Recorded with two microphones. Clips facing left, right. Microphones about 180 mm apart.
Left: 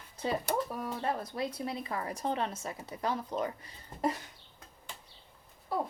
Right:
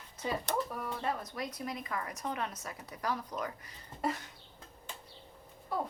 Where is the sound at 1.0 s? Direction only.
30° left (ahead or behind).